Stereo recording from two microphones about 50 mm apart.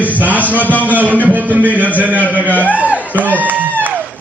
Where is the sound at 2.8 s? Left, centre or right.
Right.